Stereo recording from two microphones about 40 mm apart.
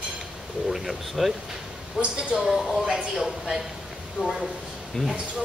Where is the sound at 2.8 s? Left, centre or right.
Right.